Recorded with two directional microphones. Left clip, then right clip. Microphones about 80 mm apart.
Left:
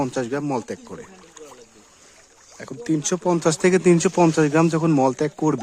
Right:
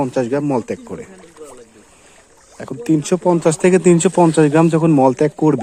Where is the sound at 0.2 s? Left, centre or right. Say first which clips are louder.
Right 7 dB; centre.